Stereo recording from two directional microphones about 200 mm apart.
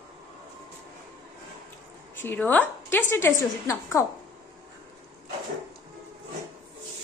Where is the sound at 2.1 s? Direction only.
10° left (ahead or behind).